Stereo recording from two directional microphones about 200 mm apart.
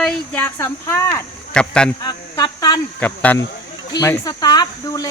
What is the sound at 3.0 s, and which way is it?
Speech, 10° left (ahead or behind).